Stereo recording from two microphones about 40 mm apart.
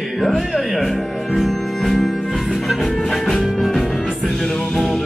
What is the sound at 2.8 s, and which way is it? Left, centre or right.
Music, centre.